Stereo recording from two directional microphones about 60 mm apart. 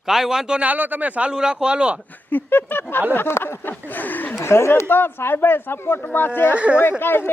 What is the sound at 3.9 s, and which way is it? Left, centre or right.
Speech, left.